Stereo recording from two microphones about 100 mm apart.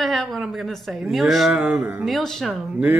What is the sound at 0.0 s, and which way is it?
Speech, centre (ahead or behind).